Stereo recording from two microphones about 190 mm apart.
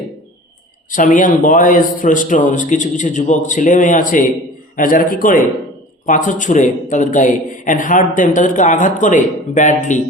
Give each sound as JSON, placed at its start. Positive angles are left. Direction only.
{"t": 0.9, "sound": "a man's voice", "side_deg": 45}